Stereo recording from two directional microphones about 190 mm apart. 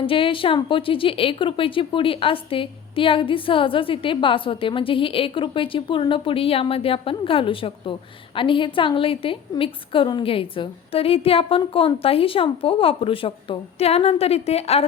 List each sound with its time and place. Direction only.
0.0 s a woman's voice: 30° left (ahead or behind)